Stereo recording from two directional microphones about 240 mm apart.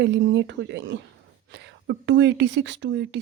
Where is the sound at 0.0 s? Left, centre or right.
Right.